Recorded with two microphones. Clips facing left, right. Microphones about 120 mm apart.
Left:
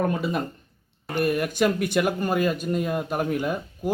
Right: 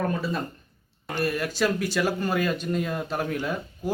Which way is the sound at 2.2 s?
10° left (ahead or behind).